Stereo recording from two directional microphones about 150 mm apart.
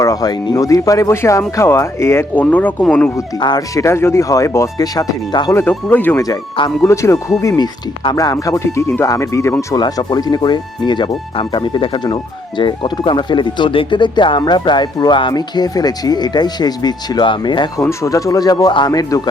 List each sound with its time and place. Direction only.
0.0 s speech: 25° left (ahead or behind); by 3.1 s 10° left (ahead or behind)
3.2 s speech: 25° left (ahead or behind)
5.5 s speech: 15° left (ahead or behind)
6.2 s speech: 25° left (ahead or behind)